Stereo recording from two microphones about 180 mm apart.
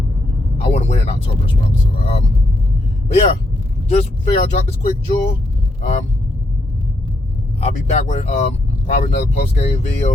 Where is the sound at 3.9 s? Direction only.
35° left (ahead or behind).